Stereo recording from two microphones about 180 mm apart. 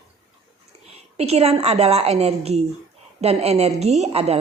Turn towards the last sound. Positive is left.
turn(degrees=-35)  # may be behind; listen again after turning